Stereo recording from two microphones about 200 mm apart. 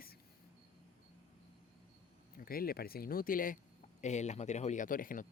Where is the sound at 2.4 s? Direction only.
45° left (ahead or behind).